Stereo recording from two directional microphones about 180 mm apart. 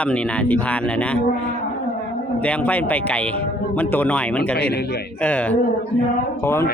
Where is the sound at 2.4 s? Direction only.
5° left (ahead or behind).